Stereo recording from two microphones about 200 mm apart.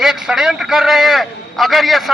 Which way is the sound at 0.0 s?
Centre (ahead or behind).